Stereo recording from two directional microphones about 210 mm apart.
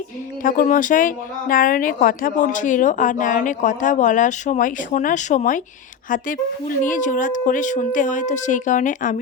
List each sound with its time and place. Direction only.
0.4 s speech: 40° left (ahead or behind)